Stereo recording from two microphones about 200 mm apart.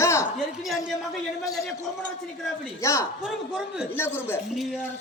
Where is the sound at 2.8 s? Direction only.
15° left (ahead or behind).